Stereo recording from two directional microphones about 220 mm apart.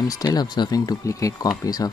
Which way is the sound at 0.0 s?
15° left (ahead or behind).